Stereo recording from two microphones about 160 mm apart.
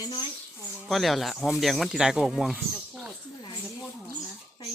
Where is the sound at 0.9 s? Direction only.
Centre (ahead or behind).